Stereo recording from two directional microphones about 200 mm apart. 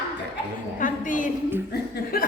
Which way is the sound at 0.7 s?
40° left (ahead or behind).